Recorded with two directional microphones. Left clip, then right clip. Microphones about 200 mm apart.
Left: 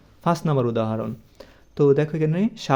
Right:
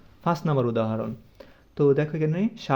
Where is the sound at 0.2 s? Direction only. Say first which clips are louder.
Left 3 dB; 30° left (ahead or behind).